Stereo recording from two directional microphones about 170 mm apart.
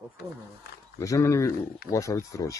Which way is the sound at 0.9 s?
20° left (ahead or behind).